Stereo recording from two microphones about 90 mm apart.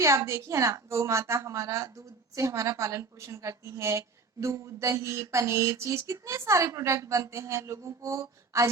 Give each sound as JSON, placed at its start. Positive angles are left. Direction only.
{"t": 0.0, "sound": "a woman's voice", "side_deg": -35}